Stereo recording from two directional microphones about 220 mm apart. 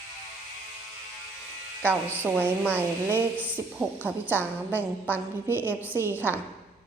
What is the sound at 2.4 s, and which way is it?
A woman's voice, 10° right (ahead or behind).